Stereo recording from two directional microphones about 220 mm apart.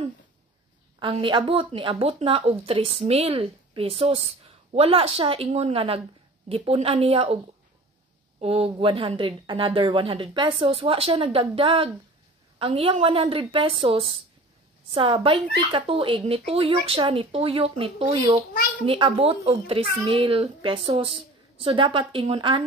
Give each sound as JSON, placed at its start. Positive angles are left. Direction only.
{"t": 0.9, "sound": "a woman's voice", "side_deg": -25}
{"t": 8.4, "sound": "a woman's voice", "side_deg": -25}